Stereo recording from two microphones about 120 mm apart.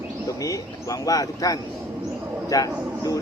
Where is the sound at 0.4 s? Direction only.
30° left (ahead or behind).